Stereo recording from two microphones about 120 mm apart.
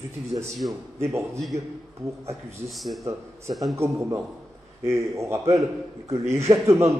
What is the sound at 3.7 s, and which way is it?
A man's voice, 20° right (ahead or behind).